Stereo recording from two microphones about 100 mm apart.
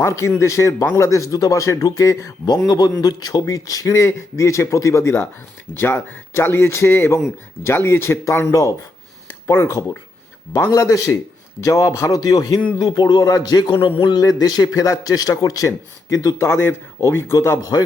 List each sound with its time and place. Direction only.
0.0 s a man's voice: 30° left (ahead or behind)